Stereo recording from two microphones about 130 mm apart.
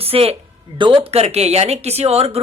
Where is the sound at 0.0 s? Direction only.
50° right (ahead or behind).